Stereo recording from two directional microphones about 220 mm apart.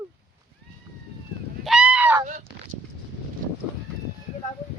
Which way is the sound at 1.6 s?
5° right (ahead or behind).